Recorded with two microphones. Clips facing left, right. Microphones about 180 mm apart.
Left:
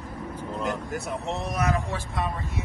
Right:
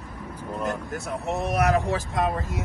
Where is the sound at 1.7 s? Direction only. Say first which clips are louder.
Right 5 dB; 40° right (ahead or behind).